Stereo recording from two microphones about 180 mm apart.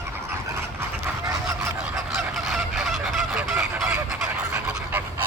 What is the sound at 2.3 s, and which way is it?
Goose, centre (ahead or behind).